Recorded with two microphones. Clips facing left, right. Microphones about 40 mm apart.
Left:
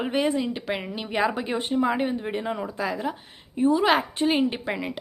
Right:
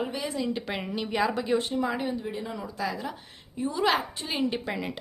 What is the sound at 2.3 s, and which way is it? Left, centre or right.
Speech, left.